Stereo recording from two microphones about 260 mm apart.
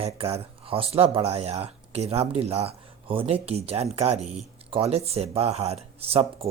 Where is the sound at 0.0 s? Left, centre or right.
Right.